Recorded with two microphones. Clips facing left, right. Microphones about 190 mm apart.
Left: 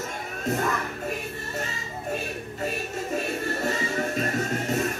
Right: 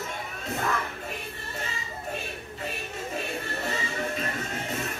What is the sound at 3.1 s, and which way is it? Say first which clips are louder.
Music: left 6 dB; 45° left (ahead or behind).